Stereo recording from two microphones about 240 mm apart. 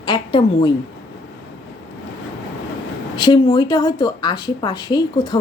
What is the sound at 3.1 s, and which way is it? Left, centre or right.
Speech, centre.